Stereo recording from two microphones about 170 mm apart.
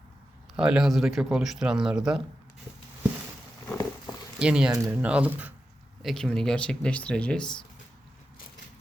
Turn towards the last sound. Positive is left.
turn(degrees=5)  # may be behind; listen again after turning